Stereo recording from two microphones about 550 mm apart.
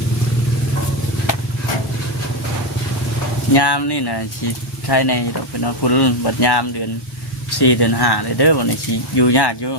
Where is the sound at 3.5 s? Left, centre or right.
Left.